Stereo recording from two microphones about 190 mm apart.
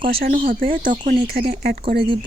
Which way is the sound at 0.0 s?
50° right (ahead or behind).